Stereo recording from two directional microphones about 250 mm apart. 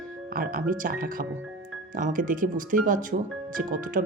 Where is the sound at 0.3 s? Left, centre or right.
Right.